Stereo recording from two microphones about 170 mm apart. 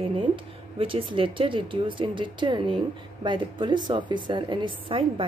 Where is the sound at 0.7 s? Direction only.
30° right (ahead or behind).